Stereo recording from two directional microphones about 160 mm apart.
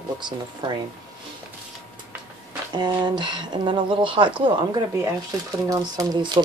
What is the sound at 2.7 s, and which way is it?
Speech, 25° right (ahead or behind).